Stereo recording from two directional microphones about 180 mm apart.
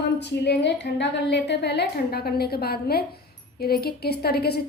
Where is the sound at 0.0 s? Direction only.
70° left (ahead or behind).